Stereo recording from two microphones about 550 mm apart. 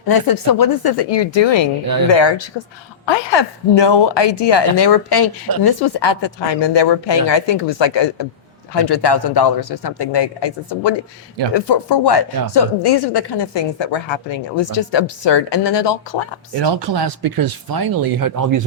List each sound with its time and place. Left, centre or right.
0.1 s speech: left
16.6 s speech: right